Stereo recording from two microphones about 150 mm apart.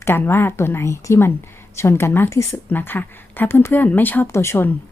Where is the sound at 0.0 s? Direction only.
15° left (ahead or behind).